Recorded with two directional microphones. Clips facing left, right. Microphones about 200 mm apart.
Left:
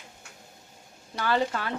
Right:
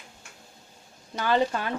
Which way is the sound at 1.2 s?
20° right (ahead or behind).